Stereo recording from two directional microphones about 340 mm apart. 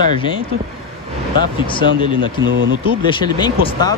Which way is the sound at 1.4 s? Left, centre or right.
Centre.